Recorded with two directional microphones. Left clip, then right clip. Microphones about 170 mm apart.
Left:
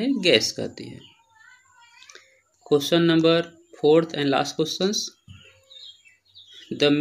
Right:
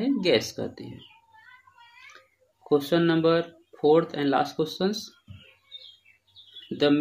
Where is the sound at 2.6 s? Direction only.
20° left (ahead or behind).